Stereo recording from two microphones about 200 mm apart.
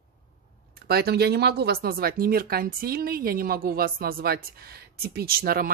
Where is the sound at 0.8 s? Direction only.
50° right (ahead or behind).